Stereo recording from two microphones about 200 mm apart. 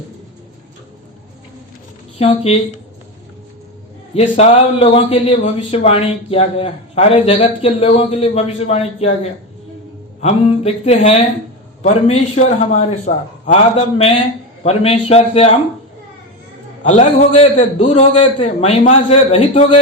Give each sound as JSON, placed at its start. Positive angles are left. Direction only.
{"t": 2.1, "sound": "speech", "side_deg": 30}
{"t": 4.1, "sound": "a man's voice", "side_deg": 30}
{"t": 10.2, "sound": "a man's voice", "side_deg": 35}
{"t": 16.8, "sound": "a man's voice", "side_deg": 35}